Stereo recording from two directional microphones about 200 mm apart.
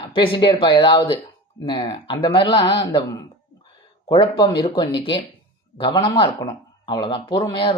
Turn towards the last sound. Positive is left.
turn(degrees=25)  # may be behind; listen again after turning